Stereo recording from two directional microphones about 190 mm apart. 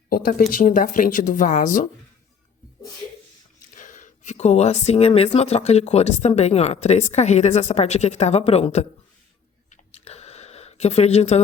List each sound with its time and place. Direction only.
0.1 s speech: 50° left (ahead or behind)
3.8 s speech: 40° left (ahead or behind)
9.9 s a sound: 35° left (ahead or behind)